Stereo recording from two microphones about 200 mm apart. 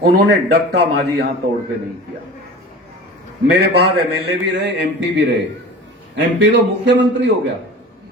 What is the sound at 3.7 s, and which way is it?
A man's voice, 60° right (ahead or behind).